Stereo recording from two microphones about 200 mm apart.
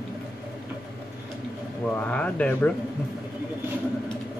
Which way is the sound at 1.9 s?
5° left (ahead or behind).